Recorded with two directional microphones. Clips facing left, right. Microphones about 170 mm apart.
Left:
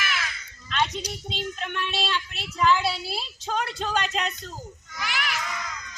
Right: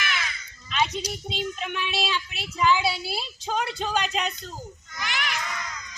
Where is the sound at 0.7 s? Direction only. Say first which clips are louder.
Right 1 dB; centre (ahead or behind).